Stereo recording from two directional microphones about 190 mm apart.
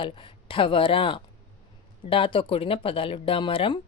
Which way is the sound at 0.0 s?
25° left (ahead or behind).